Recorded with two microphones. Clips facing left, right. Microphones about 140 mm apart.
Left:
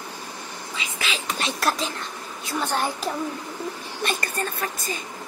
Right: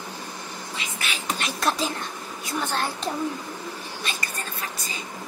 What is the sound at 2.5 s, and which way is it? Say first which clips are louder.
Speech: left 2 dB; 15° left (ahead or behind).